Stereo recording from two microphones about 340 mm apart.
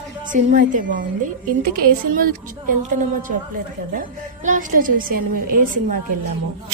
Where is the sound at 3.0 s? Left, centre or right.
Right.